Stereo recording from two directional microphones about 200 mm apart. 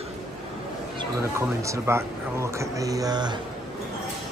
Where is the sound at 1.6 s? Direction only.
15° right (ahead or behind).